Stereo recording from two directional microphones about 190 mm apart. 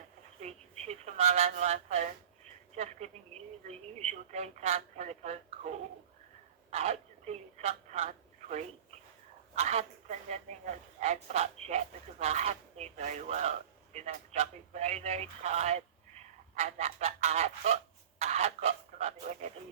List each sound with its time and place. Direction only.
0.4 s a sound: 35° right (ahead or behind)
2.7 s speech: 35° right (ahead or behind)
6.7 s telephone: 35° right (ahead or behind)
9.6 s speech: 35° right (ahead or behind)
18.2 s chicken: 35° right (ahead or behind)